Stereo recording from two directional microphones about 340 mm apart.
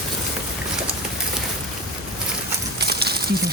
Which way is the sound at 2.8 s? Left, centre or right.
Right.